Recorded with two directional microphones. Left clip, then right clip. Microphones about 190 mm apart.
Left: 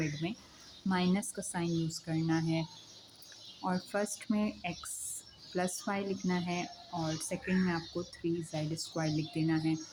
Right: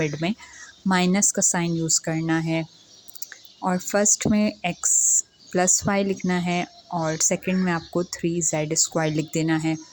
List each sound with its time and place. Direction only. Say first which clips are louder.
0.0 s speech: right 12 dB; 45° right (ahead or behind)